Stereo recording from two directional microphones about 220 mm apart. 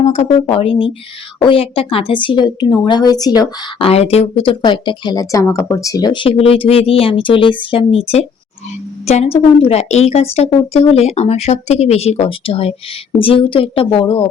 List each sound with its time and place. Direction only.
0.0 s speech: 30° left (ahead or behind)